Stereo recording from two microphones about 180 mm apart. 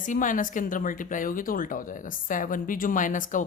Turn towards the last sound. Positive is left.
turn(degrees=45)  # may be behind; listen again after turning